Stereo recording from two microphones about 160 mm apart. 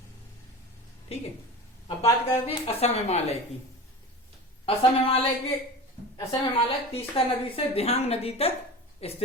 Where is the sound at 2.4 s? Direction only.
40° left (ahead or behind).